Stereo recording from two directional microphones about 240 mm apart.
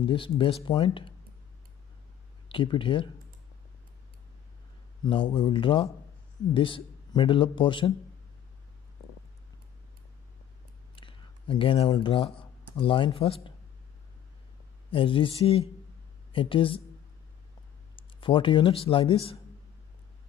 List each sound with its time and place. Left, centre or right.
0.0 s a man's voice: left
2.4 s a man's voice: left
5.0 s a man's voice: centre
11.0 s speech: left
14.9 s speech: left
17.9 s speech: left